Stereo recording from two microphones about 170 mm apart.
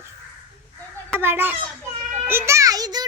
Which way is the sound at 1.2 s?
10° right (ahead or behind).